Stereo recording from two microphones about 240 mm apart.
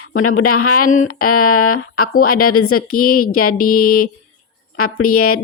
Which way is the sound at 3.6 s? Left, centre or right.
Left.